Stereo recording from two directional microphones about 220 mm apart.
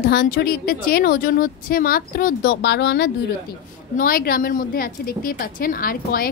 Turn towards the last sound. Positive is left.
turn(degrees=40)  # may be behind; listen again after turning